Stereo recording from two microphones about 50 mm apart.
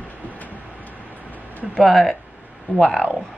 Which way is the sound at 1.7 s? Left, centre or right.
Centre.